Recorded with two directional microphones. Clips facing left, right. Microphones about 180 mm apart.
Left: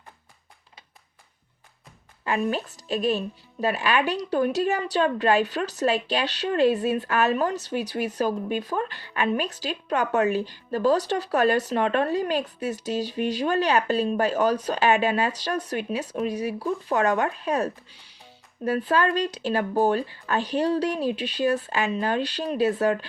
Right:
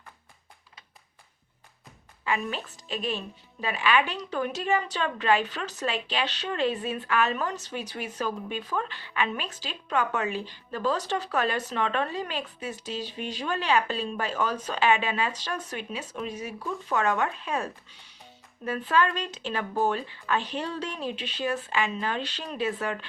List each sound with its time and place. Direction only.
2.2 s a woman's voice: 40° left (ahead or behind)